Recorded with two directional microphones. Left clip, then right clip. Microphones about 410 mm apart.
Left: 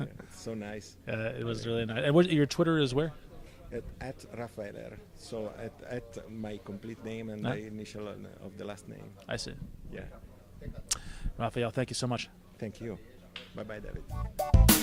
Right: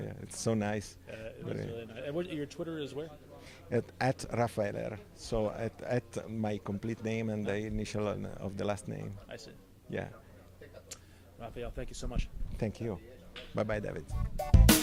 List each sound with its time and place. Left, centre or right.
0.4 s speech: right
1.0 s speech: left
3.7 s speech: right
9.2 s speech: left
10.8 s speech: left
12.5 s speech: centre
14.1 s speech: centre